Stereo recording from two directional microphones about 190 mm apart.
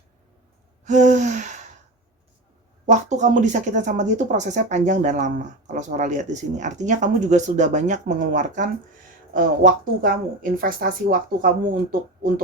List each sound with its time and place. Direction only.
0.9 s gasp: 40° right (ahead or behind)
2.8 s speech: 40° right (ahead or behind)